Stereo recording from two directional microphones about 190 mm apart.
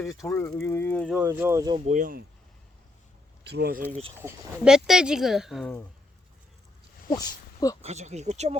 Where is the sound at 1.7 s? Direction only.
40° right (ahead or behind).